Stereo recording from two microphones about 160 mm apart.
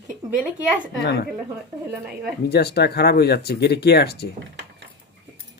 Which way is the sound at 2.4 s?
90° left.